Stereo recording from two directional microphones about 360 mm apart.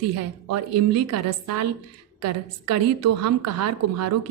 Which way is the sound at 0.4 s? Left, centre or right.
Right.